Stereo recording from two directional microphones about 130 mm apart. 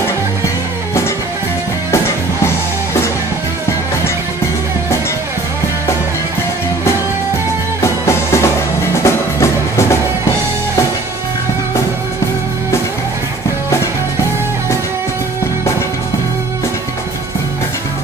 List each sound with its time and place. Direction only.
7.8 s music: 20° left (ahead or behind)